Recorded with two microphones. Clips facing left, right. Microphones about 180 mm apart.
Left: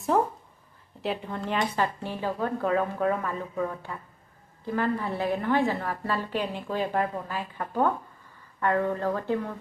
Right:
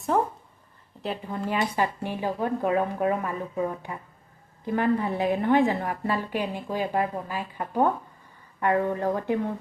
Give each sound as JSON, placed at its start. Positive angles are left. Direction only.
{"t": 0.1, "sound": "a woman's voice", "side_deg": 0}